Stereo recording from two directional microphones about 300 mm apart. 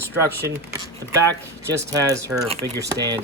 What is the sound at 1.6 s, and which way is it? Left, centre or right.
Speech, centre.